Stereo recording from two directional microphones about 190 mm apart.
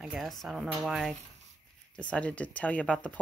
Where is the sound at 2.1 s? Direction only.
5° left (ahead or behind).